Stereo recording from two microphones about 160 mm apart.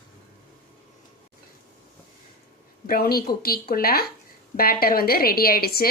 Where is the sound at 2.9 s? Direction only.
70° left (ahead or behind).